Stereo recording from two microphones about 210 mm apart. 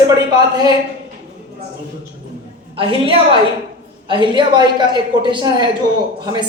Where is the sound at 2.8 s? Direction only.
25° right (ahead or behind).